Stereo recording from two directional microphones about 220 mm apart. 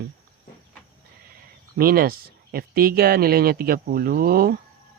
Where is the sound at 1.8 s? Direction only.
40° right (ahead or behind).